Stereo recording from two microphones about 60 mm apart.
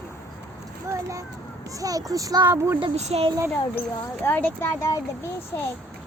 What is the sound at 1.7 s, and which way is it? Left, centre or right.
Speech, right.